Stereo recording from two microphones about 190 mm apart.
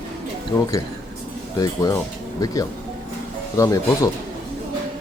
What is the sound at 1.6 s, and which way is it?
Speech, 20° left (ahead or behind).